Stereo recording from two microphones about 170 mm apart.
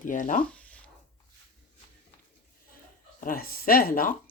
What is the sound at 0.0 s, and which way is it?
Speech, 50° left (ahead or behind).